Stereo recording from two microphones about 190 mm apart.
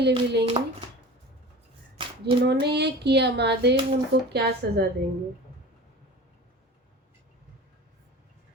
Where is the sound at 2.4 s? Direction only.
60° right (ahead or behind).